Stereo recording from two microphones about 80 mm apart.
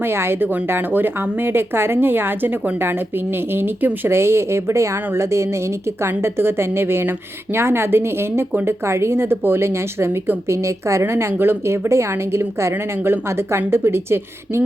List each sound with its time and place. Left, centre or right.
0.0 s speech: right